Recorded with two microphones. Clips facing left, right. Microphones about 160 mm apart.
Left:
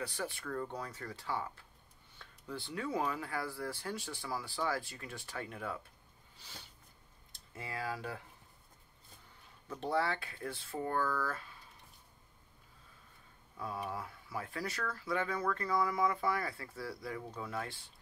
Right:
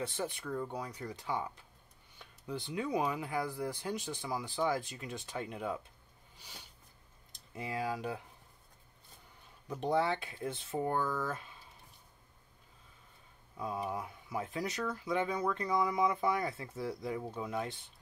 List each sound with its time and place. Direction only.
0.0 s speech: 20° right (ahead or behind)
7.3 s speech: 15° right (ahead or behind)
9.7 s speech: 15° right (ahead or behind)
13.6 s speech: 20° right (ahead or behind)